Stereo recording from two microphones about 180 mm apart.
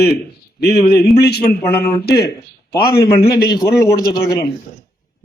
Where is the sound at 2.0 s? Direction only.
60° left (ahead or behind).